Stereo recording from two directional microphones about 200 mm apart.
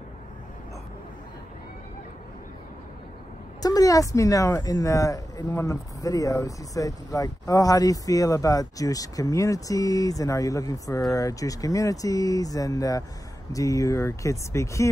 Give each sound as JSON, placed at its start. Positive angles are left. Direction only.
{"t": 3.6, "sound": "speech", "side_deg": 20}